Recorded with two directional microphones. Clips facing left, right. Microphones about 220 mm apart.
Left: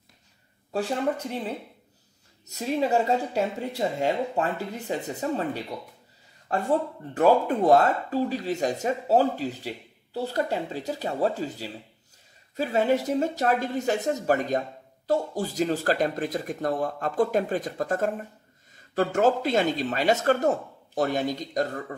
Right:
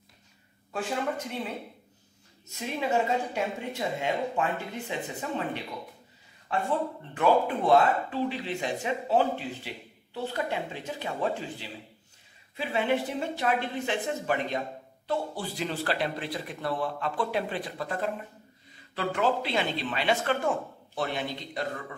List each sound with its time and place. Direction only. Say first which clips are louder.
0.7 s speech: left 4 dB; 35° left (ahead or behind)